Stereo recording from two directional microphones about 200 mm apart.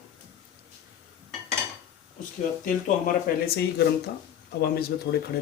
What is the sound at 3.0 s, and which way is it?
Speech, 50° left (ahead or behind).